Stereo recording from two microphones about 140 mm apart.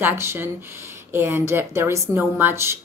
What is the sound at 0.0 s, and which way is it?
Speech, 15° right (ahead or behind).